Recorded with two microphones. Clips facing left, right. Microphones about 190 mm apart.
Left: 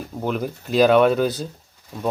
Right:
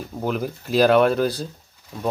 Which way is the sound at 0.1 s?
Centre (ahead or behind).